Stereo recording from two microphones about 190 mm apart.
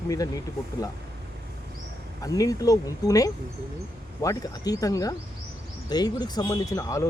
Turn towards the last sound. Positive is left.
turn(degrees=15)  # may be behind; listen again after turning